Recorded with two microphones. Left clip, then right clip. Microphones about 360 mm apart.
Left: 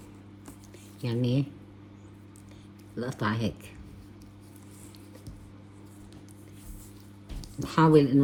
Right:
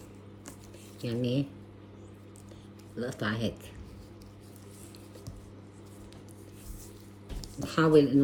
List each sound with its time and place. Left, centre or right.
1.0 s speech: centre
2.9 s speech: centre
7.6 s speech: left